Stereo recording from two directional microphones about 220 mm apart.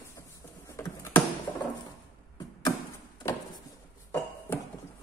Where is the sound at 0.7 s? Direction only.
15° left (ahead or behind).